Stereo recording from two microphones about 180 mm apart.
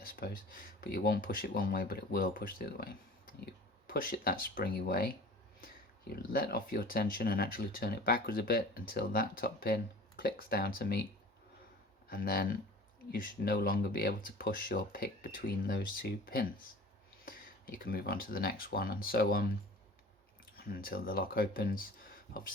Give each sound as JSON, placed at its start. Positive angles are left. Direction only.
{"t": 0.2, "sound": "speech", "side_deg": 55}
{"t": 12.0, "sound": "speech", "side_deg": 55}
{"t": 20.6, "sound": "speech", "side_deg": 55}